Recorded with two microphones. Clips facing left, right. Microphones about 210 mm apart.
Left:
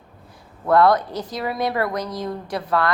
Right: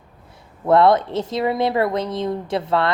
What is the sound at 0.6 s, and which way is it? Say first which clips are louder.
A woman's voice: right 2 dB; 25° right (ahead or behind).